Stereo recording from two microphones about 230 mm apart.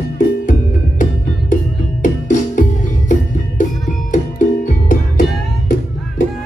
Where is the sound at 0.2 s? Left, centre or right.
Left.